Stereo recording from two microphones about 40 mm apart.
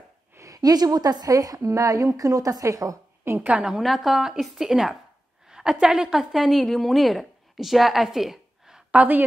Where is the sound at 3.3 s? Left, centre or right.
Right.